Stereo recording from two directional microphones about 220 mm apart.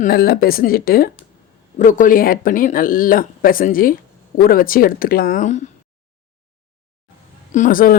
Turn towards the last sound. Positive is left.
turn(degrees=40)  # may be behind; listen again after turning